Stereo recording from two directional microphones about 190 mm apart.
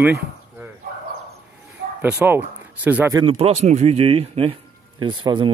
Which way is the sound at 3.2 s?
30° right (ahead or behind).